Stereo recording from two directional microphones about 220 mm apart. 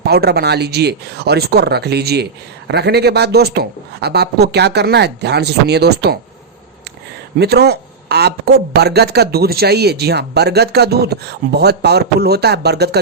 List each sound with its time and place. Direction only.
0.0 s speech: 45° right (ahead or behind)
7.3 s speech: 50° right (ahead or behind)